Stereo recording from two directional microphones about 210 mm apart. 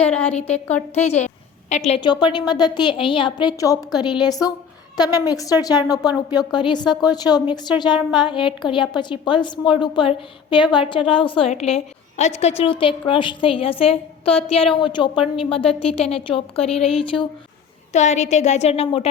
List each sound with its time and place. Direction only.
0.0 s a woman's voice: 5° left (ahead or behind)
0.9 s a woman's voice: 30° left (ahead or behind)